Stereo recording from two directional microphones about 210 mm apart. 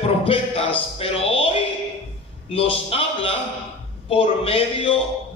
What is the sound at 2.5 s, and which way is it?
A man's voice, 25° left (ahead or behind).